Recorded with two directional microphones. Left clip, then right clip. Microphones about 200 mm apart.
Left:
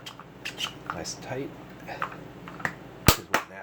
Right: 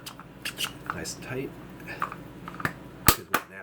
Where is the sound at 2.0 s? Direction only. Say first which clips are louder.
Right 1 dB; centre (ahead or behind).